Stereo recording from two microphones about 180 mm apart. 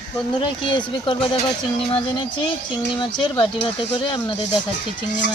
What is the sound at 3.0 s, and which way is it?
Speech, 25° left (ahead or behind).